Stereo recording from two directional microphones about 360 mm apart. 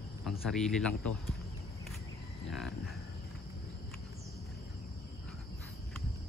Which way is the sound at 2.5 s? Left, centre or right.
Centre.